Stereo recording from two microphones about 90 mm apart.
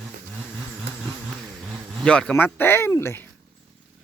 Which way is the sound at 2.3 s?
20° left (ahead or behind).